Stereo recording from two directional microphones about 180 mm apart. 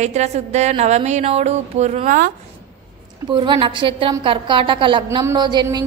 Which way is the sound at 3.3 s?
25° right (ahead or behind).